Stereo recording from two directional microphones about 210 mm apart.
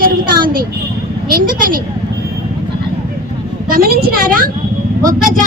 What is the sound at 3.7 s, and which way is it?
Speech, 45° right (ahead or behind).